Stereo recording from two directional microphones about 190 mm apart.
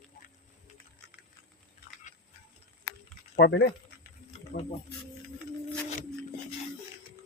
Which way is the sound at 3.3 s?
60° left (ahead or behind).